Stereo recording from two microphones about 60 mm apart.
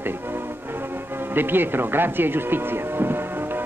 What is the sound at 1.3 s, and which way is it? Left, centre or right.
Speech, right.